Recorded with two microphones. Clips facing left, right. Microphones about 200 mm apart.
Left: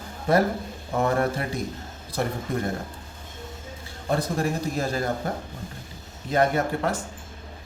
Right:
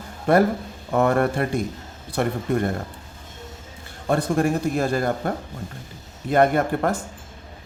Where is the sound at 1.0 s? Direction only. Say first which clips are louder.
Right 4 dB; 65° right (ahead or behind).